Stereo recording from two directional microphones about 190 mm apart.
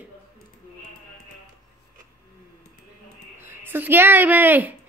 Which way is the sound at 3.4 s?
10° right (ahead or behind).